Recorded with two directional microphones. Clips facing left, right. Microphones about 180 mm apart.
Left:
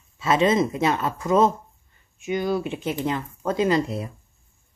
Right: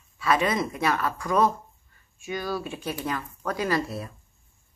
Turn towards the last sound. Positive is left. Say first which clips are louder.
# left 5 dB
turn(degrees=20)  # may be behind; listen again after turning